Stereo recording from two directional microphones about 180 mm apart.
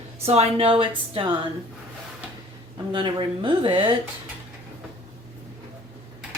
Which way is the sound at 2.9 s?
25° right (ahead or behind).